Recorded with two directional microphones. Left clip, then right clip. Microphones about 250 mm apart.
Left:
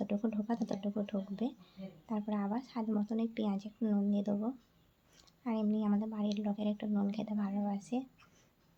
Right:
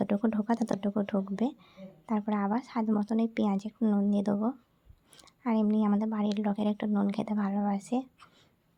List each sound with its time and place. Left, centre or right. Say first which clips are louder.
0.0 s speech: right 7 dB; right